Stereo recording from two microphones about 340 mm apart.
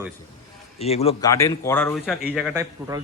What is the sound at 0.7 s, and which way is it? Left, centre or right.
A man's voice, centre.